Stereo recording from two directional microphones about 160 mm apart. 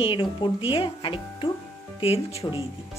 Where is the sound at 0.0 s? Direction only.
30° left (ahead or behind).